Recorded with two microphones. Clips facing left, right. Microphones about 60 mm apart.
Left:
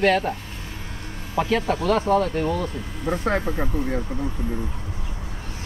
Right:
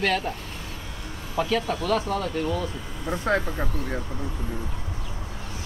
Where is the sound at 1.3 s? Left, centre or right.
Left.